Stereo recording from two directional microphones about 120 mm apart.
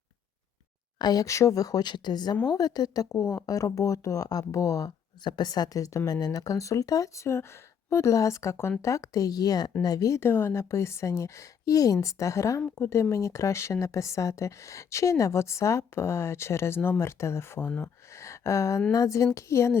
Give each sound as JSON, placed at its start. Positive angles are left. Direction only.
{"t": 0.9, "sound": "a woman's voice", "side_deg": 35}